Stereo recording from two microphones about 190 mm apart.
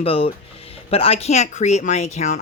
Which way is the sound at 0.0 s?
30° left (ahead or behind).